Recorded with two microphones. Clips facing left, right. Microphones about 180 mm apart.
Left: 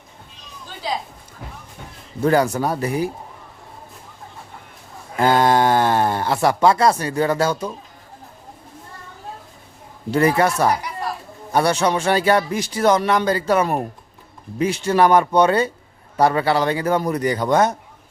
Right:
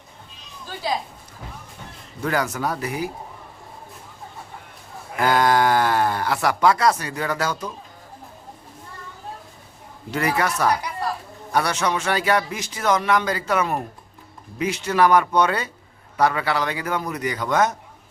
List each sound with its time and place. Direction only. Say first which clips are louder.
2.2 s speech: left 6 dB; 30° left (ahead or behind)
5.2 s speech: left 3 dB; 25° left (ahead or behind)
10.1 s a man's voice: left 6 dB; 30° left (ahead or behind)